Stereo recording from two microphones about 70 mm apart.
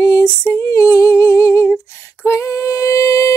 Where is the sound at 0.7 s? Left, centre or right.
Left.